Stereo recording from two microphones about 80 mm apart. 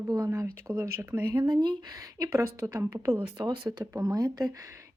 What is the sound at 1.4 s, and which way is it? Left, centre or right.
Speech, right.